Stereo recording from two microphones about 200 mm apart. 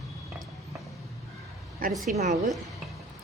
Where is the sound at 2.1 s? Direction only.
35° right (ahead or behind).